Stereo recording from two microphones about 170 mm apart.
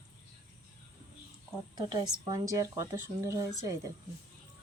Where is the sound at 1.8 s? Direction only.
25° right (ahead or behind).